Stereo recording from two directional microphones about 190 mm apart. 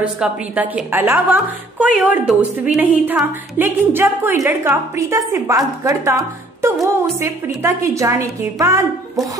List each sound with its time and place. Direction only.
0.0 s a woman's voice: 5° right (ahead or behind)